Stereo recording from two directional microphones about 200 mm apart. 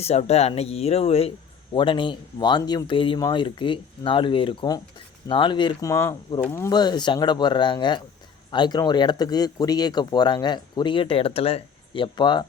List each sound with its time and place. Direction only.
0.0 s speech: 30° left (ahead or behind)